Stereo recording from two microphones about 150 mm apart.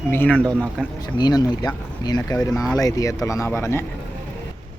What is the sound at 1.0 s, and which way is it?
Speech, 30° left (ahead or behind).